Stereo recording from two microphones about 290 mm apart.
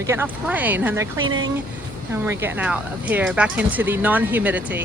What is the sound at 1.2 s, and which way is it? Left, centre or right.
Speech, right.